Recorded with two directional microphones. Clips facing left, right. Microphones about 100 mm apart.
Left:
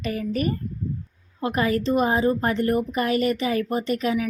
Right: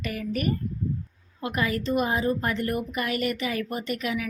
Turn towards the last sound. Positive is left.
turn(degrees=35)  # may be behind; listen again after turning